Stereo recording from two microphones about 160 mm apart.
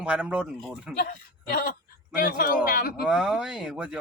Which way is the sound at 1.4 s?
65° left (ahead or behind).